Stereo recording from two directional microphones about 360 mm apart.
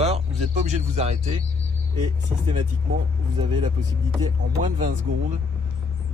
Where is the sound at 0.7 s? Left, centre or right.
Centre.